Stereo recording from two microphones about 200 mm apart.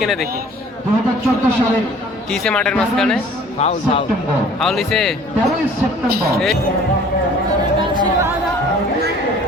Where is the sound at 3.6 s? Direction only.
35° left (ahead or behind).